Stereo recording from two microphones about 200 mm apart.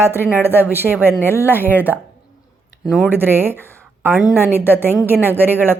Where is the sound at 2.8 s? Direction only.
Centre (ahead or behind).